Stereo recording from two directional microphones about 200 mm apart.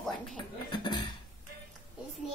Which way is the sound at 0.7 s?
20° left (ahead or behind).